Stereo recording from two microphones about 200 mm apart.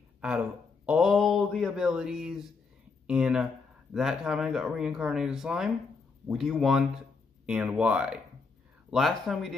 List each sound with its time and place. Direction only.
0.8 s speech: 5° right (ahead or behind)